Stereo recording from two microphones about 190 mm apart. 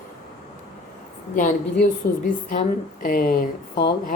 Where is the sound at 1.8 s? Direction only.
45° left (ahead or behind).